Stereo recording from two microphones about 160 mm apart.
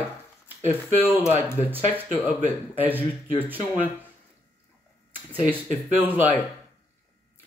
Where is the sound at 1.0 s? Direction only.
10° right (ahead or behind).